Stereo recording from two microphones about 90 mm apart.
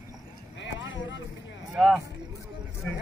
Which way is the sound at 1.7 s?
10° right (ahead or behind).